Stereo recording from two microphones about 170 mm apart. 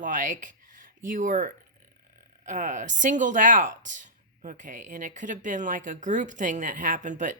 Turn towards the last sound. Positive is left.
turn(degrees=-50)  # may be behind; listen again after turning